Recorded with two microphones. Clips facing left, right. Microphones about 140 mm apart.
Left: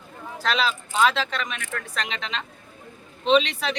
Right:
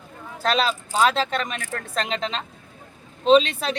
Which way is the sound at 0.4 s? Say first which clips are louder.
Right 3 dB; 40° right (ahead or behind).